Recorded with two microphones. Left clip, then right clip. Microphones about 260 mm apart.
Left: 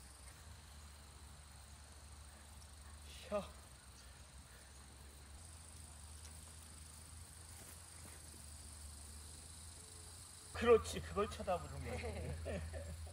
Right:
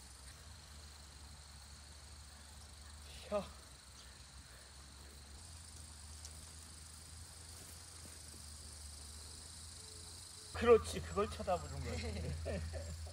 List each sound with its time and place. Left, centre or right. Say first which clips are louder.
3.2 s cricket: right 2 dB; centre
10.5 s speech: right 2 dB; centre
11.8 s speech: right 1 dB; left
12.5 s speech: right 3 dB; centre